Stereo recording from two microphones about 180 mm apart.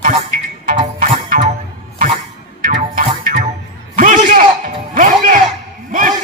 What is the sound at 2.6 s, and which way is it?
Music, 45° right (ahead or behind).